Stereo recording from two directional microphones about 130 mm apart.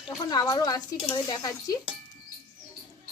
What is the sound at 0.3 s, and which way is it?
A woman's voice, 30° left (ahead or behind).